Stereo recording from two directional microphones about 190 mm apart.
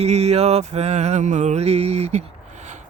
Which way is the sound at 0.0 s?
35° right (ahead or behind).